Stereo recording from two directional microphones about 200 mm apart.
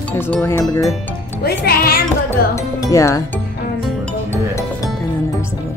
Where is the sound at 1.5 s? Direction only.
50° left (ahead or behind).